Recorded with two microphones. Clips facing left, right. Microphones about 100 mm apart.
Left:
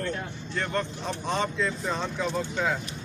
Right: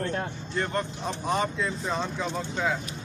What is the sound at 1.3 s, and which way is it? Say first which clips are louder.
Speech: even; 10° right (ahead or behind).